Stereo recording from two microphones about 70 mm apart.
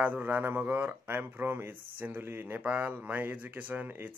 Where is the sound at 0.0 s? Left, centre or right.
Right.